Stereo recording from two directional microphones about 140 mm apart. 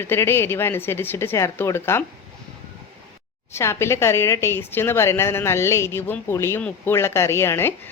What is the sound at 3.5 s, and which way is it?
Speech, 20° left (ahead or behind).